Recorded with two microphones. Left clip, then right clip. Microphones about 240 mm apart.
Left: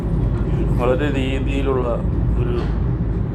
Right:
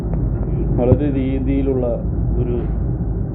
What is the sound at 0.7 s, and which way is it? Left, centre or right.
Speech, left.